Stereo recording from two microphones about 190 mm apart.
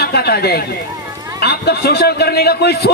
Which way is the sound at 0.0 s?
60° left (ahead or behind).